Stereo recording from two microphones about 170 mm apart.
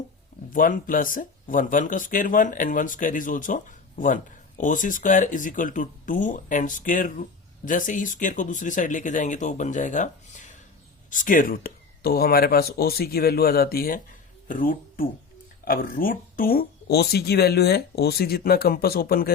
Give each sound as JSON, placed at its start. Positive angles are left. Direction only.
{"t": 0.5, "sound": "speech", "side_deg": 55}